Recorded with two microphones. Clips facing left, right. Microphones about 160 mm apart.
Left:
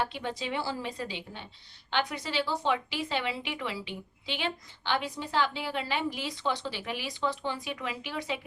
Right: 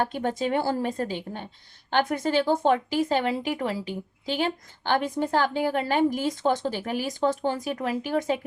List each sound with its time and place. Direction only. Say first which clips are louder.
0.0 s speech: right 7 dB; 45° right (ahead or behind)